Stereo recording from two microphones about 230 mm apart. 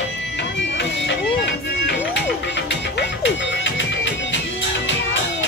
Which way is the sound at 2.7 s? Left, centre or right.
Left.